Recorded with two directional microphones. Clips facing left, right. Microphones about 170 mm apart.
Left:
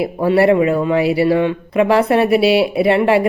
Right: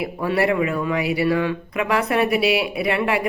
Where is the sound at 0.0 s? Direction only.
30° left (ahead or behind).